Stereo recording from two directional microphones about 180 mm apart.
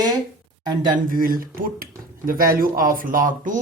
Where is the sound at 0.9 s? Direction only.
50° right (ahead or behind).